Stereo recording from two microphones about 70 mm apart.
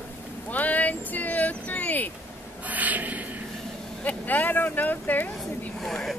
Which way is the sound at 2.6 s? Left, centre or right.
Right.